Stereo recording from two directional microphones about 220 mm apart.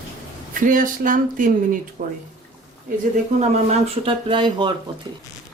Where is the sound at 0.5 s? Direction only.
35° right (ahead or behind); by 4.7 s 20° right (ahead or behind).